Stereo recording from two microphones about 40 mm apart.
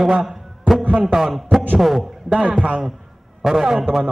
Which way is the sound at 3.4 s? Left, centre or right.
Centre.